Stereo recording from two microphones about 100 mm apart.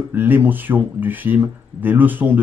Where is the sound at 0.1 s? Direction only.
20° right (ahead or behind).